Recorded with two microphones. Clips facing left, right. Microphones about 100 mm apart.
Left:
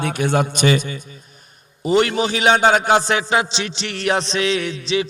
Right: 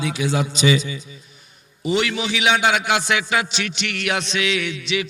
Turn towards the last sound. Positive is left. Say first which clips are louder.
# left 3 dB
turn(degrees=35)  # may be behind; listen again after turning